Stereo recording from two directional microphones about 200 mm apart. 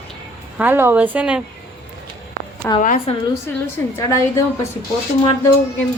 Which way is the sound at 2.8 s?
40° left (ahead or behind).